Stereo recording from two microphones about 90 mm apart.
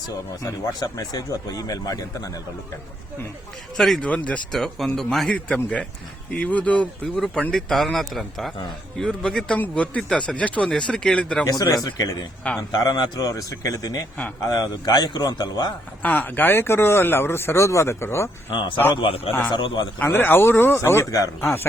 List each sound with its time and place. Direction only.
0.9 s a man's voice: 45° left (ahead or behind)
3.8 s speech: centre (ahead or behind)
4.0 s speech: 15° left (ahead or behind)
4.5 s speech: centre (ahead or behind)
11.4 s a man's voice: 45° left (ahead or behind)
16.0 s speech: 20° left (ahead or behind)
18.9 s a man's voice: 85° left
19.5 s a man's voice: 60° left (ahead or behind)
20.0 s speech: 20° left (ahead or behind); by 21.2 s 35° left (ahead or behind)
21.4 s speech: 25° left (ahead or behind)